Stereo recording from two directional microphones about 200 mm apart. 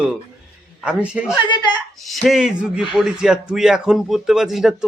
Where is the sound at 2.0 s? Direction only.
Centre (ahead or behind).